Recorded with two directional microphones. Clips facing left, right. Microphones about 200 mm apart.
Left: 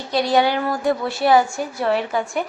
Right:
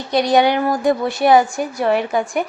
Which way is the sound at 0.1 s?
20° right (ahead or behind).